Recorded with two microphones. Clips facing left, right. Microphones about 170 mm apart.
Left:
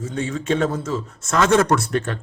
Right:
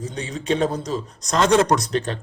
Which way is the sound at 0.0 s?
15° right (ahead or behind).